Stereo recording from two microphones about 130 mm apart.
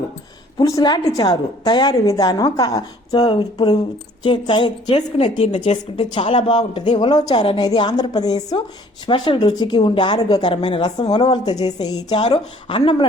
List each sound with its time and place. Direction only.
0.6 s a woman's voice: 30° left (ahead or behind); by 5.7 s 60° left (ahead or behind)
6.0 s a woman's voice: 40° left (ahead or behind)
12.2 s a woman's voice: 40° left (ahead or behind)